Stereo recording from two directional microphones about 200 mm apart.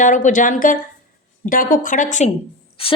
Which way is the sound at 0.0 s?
40° left (ahead or behind).